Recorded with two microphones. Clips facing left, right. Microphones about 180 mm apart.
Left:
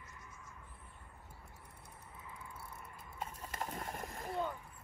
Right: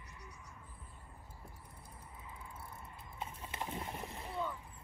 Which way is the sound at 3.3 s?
40° left (ahead or behind).